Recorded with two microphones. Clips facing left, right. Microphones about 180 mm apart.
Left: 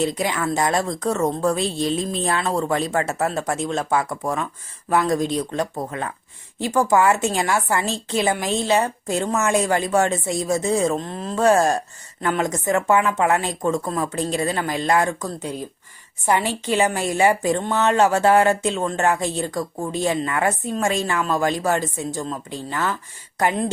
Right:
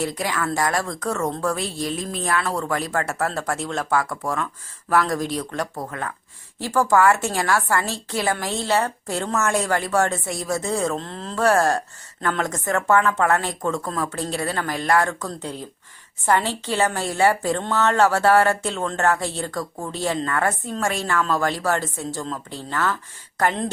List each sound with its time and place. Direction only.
0.0 s a woman's voice: 20° left (ahead or behind)